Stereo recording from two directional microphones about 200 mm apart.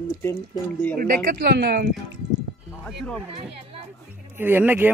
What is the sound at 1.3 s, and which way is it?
Speech, 50° right (ahead or behind).